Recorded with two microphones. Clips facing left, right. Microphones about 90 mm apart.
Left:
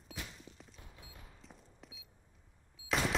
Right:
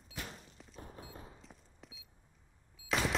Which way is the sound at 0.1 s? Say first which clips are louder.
Right 1 dB; 45° right (ahead or behind).